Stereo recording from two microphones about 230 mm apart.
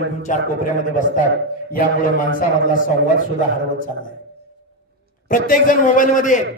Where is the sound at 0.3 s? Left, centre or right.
Left.